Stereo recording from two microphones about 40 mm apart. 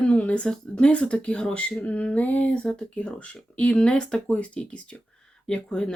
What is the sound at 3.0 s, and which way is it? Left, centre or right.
Speech, left.